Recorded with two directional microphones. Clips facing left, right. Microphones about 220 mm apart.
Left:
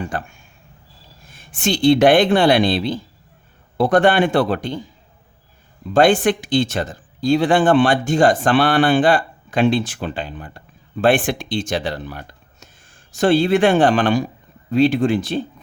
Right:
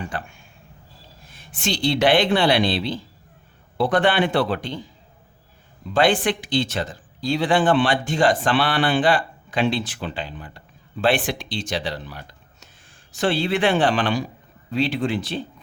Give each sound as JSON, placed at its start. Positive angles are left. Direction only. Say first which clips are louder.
{"t": 0.1, "sound": "speech", "louder": "left 4 dB", "side_deg": 45}
{"t": 5.9, "sound": "speech", "louder": "left 5 dB", "side_deg": 45}